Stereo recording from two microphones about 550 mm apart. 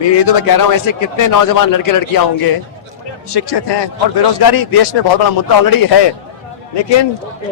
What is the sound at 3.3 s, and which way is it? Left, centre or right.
Speech, left.